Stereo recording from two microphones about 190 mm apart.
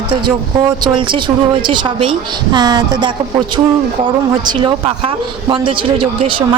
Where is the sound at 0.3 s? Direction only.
25° right (ahead or behind).